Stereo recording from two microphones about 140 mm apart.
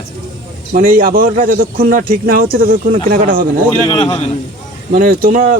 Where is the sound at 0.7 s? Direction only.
90° right.